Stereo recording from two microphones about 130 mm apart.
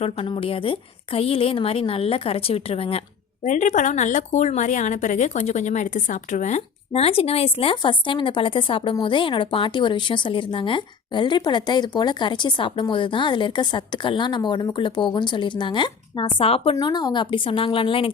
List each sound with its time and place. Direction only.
0.0 s a woman's voice: 45° left (ahead or behind)
3.4 s a woman's voice: 70° left (ahead or behind); by 16.7 s 45° left (ahead or behind)
16.8 s a woman's voice: 35° left (ahead or behind)